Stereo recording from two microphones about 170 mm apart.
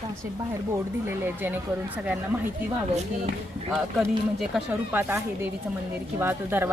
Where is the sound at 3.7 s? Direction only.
Centre (ahead or behind).